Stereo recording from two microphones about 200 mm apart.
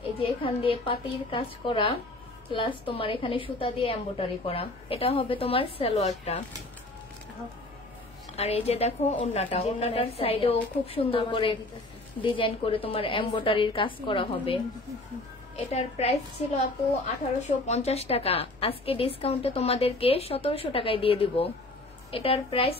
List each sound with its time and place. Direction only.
0.2 s a woman's voice: 25° left (ahead or behind)
8.4 s a woman's voice: 30° left (ahead or behind)
17.4 s a woman's voice: 35° left (ahead or behind)